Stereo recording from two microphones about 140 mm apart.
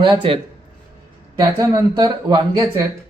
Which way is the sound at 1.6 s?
25° right (ahead or behind).